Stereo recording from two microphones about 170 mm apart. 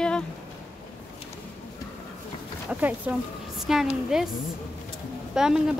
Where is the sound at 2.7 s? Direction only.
10° right (ahead or behind).